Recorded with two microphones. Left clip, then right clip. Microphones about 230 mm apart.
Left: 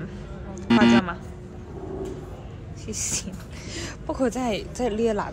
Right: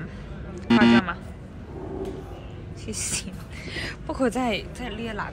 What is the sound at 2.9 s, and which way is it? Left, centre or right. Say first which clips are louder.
Speech: left 1 dB; centre.